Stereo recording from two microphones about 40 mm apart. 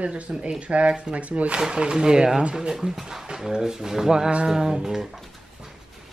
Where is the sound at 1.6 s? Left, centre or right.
Centre.